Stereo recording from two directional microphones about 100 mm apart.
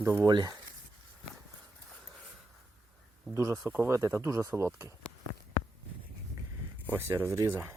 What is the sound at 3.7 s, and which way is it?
Speech, 20° right (ahead or behind).